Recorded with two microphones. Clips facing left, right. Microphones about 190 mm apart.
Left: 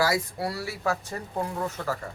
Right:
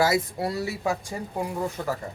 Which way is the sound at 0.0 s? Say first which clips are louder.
Right 3 dB; 20° right (ahead or behind).